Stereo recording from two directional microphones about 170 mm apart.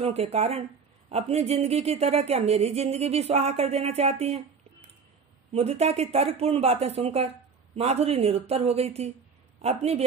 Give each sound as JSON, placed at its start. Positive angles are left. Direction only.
{"t": 0.0, "sound": "speech", "side_deg": -40}
{"t": 5.5, "sound": "speech", "side_deg": -35}